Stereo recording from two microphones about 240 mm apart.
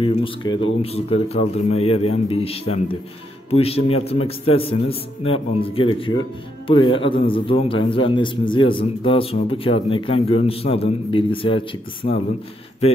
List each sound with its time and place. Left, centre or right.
0.0 s a man's voice: left